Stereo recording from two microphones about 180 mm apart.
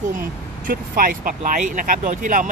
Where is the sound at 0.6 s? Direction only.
55° right (ahead or behind).